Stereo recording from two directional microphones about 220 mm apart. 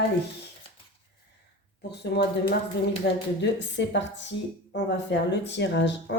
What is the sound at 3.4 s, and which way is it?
A woman's voice, 55° left (ahead or behind).